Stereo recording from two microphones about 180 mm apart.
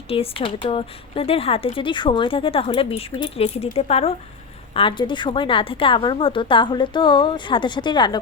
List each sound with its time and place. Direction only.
0.1 s a woman's voice: 30° left (ahead or behind)